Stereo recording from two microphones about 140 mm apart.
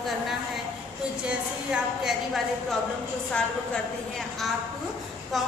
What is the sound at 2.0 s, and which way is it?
Speech, centre (ahead or behind).